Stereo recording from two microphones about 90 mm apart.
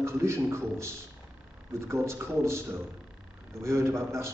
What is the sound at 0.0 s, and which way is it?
A man's voice, 30° right (ahead or behind).